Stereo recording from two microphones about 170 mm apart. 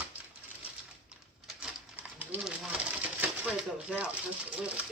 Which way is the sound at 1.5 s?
5° right (ahead or behind).